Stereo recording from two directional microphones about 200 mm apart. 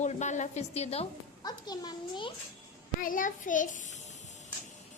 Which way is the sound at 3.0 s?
45° left (ahead or behind).